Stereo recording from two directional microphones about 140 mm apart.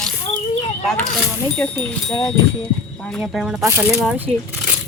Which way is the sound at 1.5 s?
5° left (ahead or behind).